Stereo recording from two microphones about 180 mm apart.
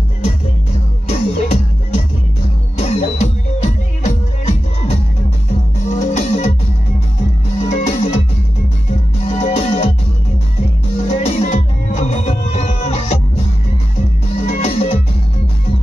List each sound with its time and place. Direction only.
1.0 s music: 35° left (ahead or behind)
2.8 s music: 35° left (ahead or behind)
7.6 s music: 40° left (ahead or behind)
9.2 s music: 35° left (ahead or behind)
11.1 s music: 40° left (ahead or behind)
14.3 s music: 35° left (ahead or behind)